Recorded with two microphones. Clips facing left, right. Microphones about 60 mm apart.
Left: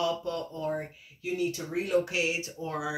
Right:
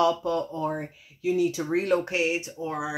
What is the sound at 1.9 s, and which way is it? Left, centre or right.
Speech, right.